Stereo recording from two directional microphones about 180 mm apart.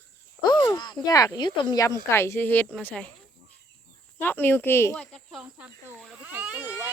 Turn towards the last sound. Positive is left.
turn(degrees=-10)  # may be behind; listen again after turning